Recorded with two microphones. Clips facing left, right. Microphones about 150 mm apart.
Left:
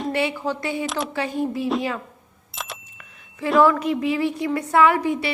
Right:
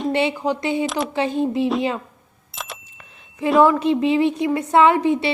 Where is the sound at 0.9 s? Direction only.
Centre (ahead or behind).